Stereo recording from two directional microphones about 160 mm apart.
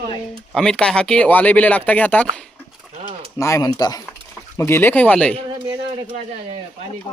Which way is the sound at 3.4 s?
20° left (ahead or behind).